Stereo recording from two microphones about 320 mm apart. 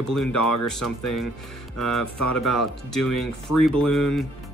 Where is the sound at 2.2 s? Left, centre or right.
Left.